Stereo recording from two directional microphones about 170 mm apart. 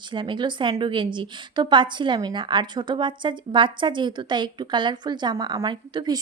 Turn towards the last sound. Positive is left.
turn(degrees=-25)  # may be behind; listen again after turning